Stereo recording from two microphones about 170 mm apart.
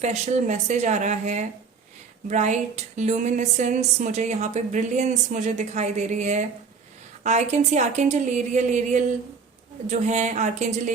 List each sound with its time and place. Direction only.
0.0 s a woman's voice: 45° right (ahead or behind)